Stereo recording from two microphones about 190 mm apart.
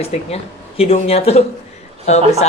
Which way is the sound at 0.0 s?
35° left (ahead or behind).